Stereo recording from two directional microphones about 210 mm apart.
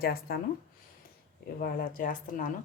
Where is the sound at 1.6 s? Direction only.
40° left (ahead or behind).